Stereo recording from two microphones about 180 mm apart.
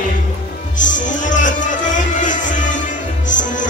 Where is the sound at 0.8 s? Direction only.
45° left (ahead or behind).